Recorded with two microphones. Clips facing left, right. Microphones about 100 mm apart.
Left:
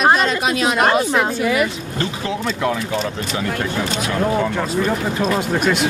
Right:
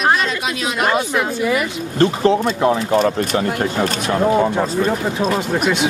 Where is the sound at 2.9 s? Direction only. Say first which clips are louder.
Right 7 dB; 50° right (ahead or behind).